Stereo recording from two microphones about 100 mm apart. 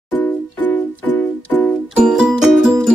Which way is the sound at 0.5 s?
15° left (ahead or behind).